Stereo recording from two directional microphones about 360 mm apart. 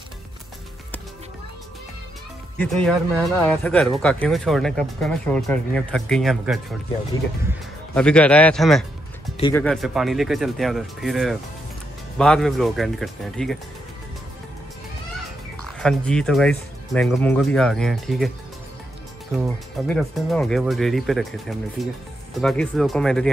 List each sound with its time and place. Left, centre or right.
2.6 s speech: centre
7.9 s speech: centre
15.8 s speech: centre
19.3 s speech: centre